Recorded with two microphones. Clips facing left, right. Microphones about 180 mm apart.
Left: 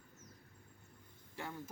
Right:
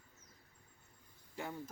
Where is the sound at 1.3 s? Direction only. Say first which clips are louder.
Right 2 dB; 15° right (ahead or behind).